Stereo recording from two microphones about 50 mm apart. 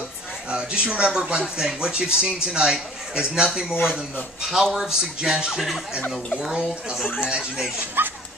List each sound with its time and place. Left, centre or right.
0.5 s speech: centre
8.0 s speech: right